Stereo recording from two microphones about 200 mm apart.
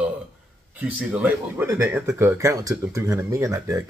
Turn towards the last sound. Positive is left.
turn(degrees=-15)  # may be behind; listen again after turning